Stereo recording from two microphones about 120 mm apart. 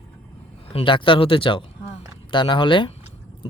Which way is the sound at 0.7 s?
45° left (ahead or behind).